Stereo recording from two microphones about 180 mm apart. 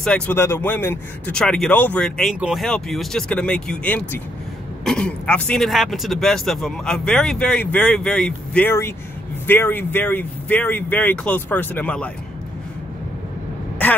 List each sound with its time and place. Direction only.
0.0 s speech: 10° left (ahead or behind)
13.8 s speech: 10° left (ahead or behind)